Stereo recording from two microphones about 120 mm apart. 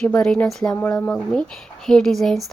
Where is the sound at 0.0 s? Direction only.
5° left (ahead or behind).